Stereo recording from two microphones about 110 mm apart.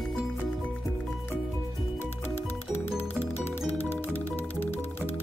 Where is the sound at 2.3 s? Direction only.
20° left (ahead or behind).